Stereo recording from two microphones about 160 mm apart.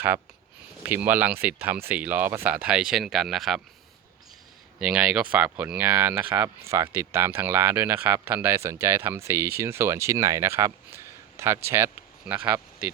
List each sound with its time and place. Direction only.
0.9 s speech: 10° right (ahead or behind)
4.8 s speech: 5° right (ahead or behind)